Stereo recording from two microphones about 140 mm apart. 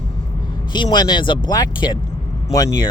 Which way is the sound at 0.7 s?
30° left (ahead or behind).